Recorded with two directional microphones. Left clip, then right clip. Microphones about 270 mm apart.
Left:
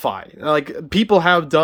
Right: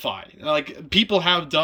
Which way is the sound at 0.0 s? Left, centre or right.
Centre.